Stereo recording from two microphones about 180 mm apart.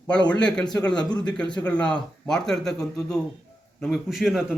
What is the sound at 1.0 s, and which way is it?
Speech, 20° left (ahead or behind).